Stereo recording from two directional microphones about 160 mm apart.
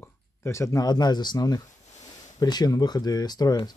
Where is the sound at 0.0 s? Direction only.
15° left (ahead or behind).